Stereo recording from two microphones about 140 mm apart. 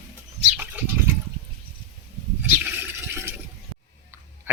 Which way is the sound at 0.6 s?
10° right (ahead or behind).